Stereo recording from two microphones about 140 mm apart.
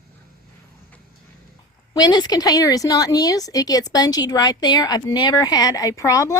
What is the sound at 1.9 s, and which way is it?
Speech, 30° left (ahead or behind).